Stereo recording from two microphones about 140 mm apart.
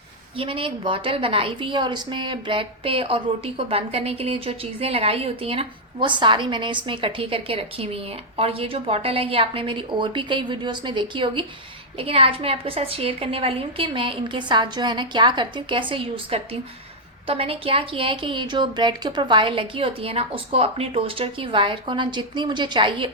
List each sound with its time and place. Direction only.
0.3 s a woman's voice: 40° right (ahead or behind)